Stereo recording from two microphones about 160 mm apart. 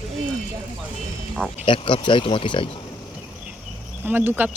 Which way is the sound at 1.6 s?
30° left (ahead or behind).